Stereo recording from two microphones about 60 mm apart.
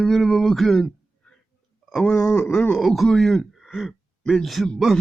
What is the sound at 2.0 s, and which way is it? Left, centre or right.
Speech, centre.